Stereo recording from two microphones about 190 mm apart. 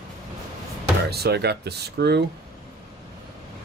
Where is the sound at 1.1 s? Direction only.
60° right (ahead or behind).